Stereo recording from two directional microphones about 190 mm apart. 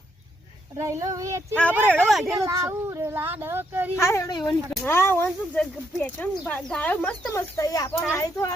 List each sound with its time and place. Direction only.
0.8 s speech: 15° right (ahead or behind)
2.0 s speech: centre (ahead or behind)
2.4 s speech: 15° right (ahead or behind)
3.9 s speech: 15° left (ahead or behind)